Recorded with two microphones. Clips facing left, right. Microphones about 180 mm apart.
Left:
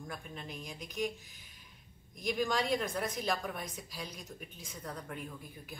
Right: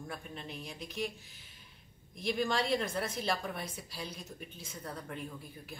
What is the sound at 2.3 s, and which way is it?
Speech, centre (ahead or behind).